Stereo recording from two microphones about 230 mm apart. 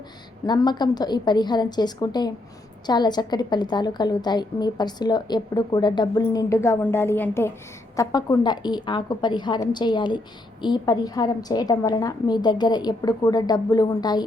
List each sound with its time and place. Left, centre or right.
0.4 s a woman's voice: centre